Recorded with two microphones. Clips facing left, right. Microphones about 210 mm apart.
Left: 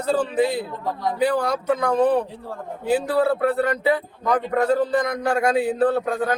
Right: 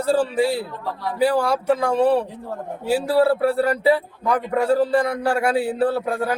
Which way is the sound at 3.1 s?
30° right (ahead or behind).